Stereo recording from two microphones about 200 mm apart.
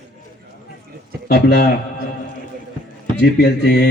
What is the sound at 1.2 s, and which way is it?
Speech, 50° left (ahead or behind).